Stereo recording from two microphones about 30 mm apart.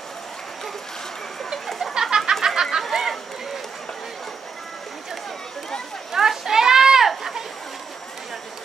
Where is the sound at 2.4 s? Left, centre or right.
Centre.